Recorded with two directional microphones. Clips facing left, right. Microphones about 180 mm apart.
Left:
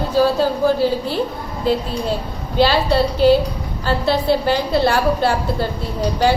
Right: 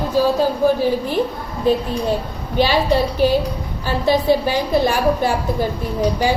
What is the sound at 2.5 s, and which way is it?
A woman's voice, 15° right (ahead or behind).